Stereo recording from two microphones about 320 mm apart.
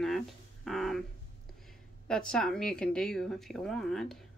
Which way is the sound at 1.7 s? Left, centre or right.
Centre.